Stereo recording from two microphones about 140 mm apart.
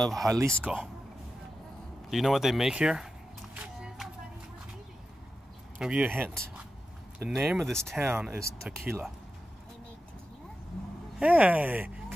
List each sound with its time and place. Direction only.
0.0 s speech: centre (ahead or behind)
2.0 s speech: centre (ahead or behind)
3.5 s a sound: 5° right (ahead or behind)
5.8 s speech: 10° right (ahead or behind)
8.0 s speech: 15° right (ahead or behind)
11.1 s speech: 10° right (ahead or behind)